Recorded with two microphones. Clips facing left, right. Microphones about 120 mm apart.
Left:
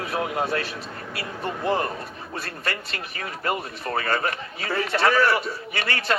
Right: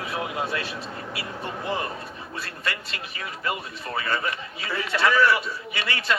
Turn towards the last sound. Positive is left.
turn(degrees=45)  # may be behind; listen again after turning